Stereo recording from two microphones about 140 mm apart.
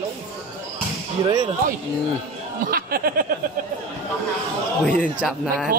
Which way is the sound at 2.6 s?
90° right.